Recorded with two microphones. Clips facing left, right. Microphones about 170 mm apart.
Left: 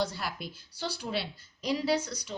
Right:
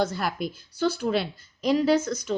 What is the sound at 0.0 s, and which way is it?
A woman's voice, 50° right (ahead or behind).